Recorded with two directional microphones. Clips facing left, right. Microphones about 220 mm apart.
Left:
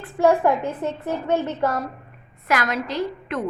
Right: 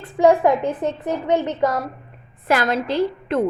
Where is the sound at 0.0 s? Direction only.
15° right (ahead or behind).